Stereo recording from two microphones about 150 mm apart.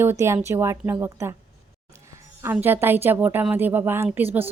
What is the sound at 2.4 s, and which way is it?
A woman's voice, 15° right (ahead or behind).